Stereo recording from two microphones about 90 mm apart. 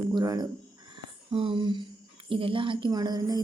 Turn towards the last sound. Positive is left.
turn(degrees=-45)  # may be behind; listen again after turning